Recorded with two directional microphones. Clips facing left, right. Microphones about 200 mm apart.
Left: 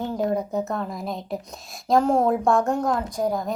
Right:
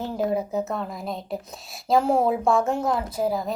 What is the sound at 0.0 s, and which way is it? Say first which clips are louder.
Speech: left 1 dB; 5° right (ahead or behind).